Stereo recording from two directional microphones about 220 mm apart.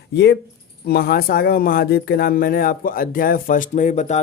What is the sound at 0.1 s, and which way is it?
Speech, 50° left (ahead or behind).